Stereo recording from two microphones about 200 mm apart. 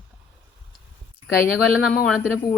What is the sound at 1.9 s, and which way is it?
Speech, 5° left (ahead or behind).